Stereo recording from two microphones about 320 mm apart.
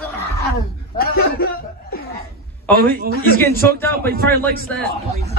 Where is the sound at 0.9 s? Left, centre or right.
Left.